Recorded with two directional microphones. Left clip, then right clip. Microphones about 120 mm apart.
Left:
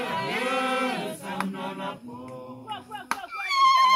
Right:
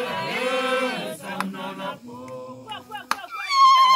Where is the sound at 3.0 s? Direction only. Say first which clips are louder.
Right 2 dB; 20° right (ahead or behind).